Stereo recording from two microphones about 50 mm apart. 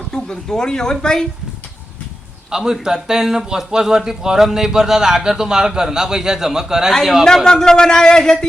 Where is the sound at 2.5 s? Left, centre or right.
Centre.